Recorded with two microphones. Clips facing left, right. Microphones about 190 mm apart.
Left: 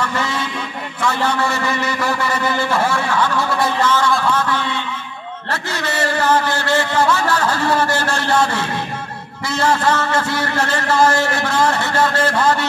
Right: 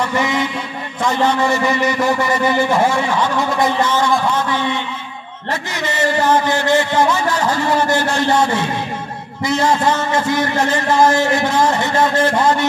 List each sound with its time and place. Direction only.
0.0 s vehicle: 15° right (ahead or behind)
1.0 s a man's voice: 15° right (ahead or behind)